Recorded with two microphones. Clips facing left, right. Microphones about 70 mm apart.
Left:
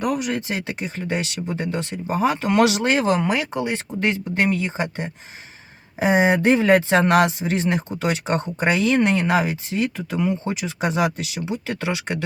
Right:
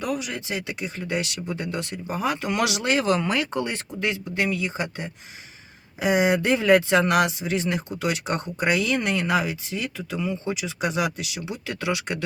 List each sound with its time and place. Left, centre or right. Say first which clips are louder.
0.0 s speech: left 5 dB; left
4.0 s speech: left 4 dB; left